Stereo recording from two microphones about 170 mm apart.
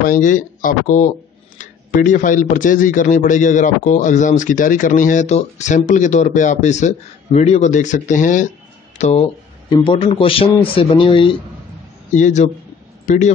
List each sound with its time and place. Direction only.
0.0 s speech: 50° left (ahead or behind); by 11.3 s 30° left (ahead or behind)
12.2 s speech: 45° left (ahead or behind)